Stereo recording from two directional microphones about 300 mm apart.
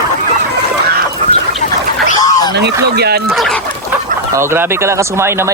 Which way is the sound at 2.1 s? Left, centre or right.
Centre.